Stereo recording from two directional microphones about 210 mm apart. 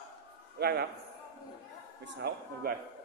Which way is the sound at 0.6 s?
50° right (ahead or behind).